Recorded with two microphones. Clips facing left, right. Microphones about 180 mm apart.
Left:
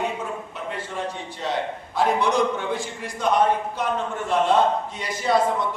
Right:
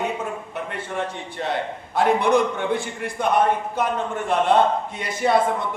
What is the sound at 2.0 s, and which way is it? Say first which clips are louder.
A man's voice: right 3 dB; 55° right (ahead or behind).